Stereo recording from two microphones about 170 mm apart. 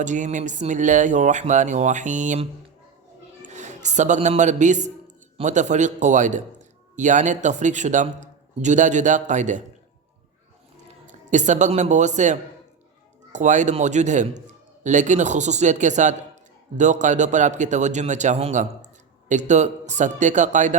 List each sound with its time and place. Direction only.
0.0 s a man's voice: 45° right (ahead or behind)
11.0 s a man's voice: 45° right (ahead or behind)